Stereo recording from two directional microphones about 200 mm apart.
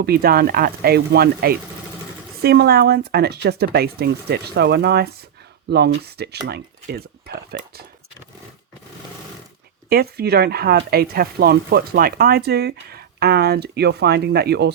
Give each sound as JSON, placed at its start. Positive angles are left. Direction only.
{"t": 0.0, "sound": "speech", "side_deg": -50}
{"t": 9.9, "sound": "speech", "side_deg": -50}